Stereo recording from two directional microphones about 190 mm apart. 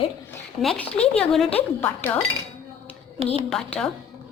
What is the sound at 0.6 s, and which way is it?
Speech, 5° left (ahead or behind).